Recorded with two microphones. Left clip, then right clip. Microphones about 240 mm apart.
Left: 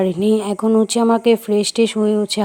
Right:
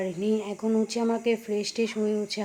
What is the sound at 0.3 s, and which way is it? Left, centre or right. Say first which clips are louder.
Speech: left 11 dB; left.